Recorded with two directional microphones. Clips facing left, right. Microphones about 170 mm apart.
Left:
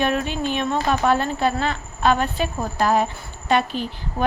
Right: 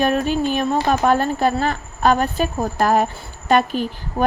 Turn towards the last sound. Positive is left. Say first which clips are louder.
# right 4 dB
turn(degrees=-50)  # may be behind; listen again after turning